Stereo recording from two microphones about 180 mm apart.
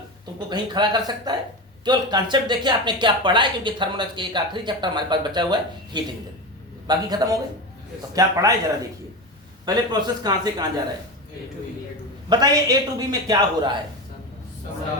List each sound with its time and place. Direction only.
0.3 s speech: 25° right (ahead or behind)
9.6 s speech: 20° right (ahead or behind)
12.3 s speech: 20° right (ahead or behind)